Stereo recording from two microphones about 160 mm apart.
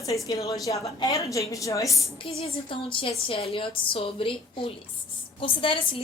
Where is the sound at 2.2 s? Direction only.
40° left (ahead or behind).